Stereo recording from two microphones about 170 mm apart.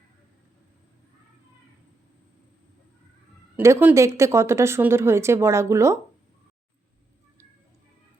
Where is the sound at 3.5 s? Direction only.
15° right (ahead or behind).